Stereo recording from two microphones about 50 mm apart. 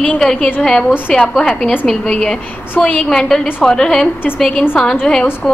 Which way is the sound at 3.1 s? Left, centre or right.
Centre.